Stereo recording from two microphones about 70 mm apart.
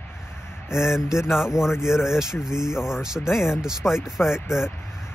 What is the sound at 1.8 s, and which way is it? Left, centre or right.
Speech, centre.